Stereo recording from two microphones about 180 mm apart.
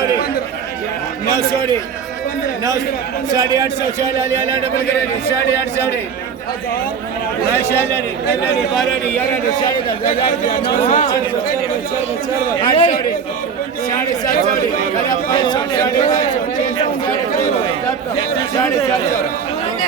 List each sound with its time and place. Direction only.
3.3 s a man's voice: 20° right (ahead or behind)
9.6 s speech: 30° left (ahead or behind)
10.8 s a man's voice: 45° left (ahead or behind)
12.6 s speech: 25° left (ahead or behind)
15.3 s speech: 25° left (ahead or behind)
18.5 s speech: 20° left (ahead or behind)